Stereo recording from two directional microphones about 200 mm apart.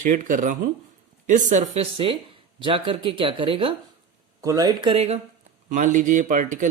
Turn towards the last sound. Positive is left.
turn(degrees=-40)  # may be behind; listen again after turning